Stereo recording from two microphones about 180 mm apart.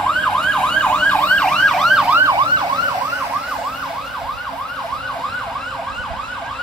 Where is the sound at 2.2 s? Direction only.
20° right (ahead or behind).